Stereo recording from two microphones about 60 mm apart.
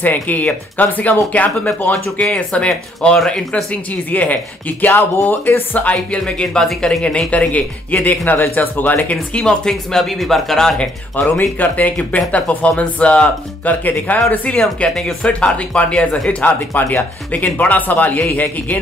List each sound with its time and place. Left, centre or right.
0.0 s speech: left
3.3 s speech: centre
3.7 s speech: left
5.9 s speech: centre; by 9.1 s left
9.1 s speech: centre
9.7 s speech: centre
11.2 s speech: left